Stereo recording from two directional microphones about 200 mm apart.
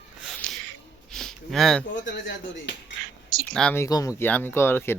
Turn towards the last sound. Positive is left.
turn(degrees=10)  # may be behind; listen again after turning